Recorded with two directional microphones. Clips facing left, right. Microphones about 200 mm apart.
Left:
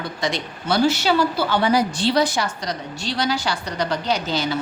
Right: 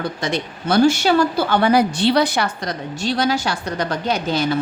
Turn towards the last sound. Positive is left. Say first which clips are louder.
# right 3 dB
turn(degrees=-55)  # may be behind; listen again after turning